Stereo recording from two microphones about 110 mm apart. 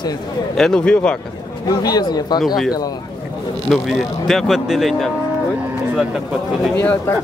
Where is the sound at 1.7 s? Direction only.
35° left (ahead or behind).